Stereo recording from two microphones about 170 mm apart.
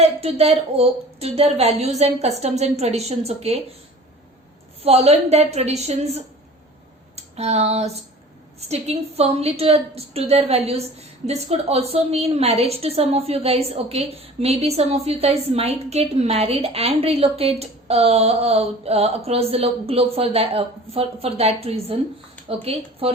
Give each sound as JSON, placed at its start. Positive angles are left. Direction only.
{"t": 0.0, "sound": "a woman's voice", "side_deg": -35}
{"t": 4.8, "sound": "a woman's voice", "side_deg": -35}
{"t": 7.2, "sound": "a sound", "side_deg": -40}
{"t": 8.7, "sound": "a woman's voice", "side_deg": -40}